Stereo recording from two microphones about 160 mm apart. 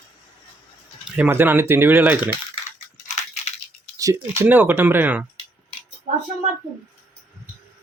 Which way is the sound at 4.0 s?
20° right (ahead or behind).